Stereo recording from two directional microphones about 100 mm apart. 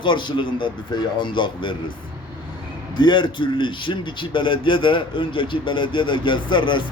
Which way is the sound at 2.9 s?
50° left (ahead or behind).